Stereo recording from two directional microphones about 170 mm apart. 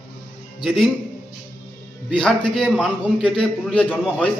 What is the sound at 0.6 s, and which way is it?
Speech, centre (ahead or behind).